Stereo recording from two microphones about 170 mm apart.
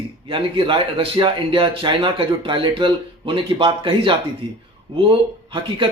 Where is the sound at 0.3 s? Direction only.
30° right (ahead or behind).